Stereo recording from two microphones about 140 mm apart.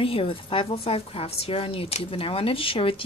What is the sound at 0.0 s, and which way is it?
A woman's voice, 40° left (ahead or behind).